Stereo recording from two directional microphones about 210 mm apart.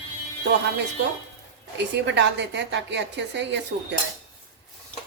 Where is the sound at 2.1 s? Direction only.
60° right (ahead or behind).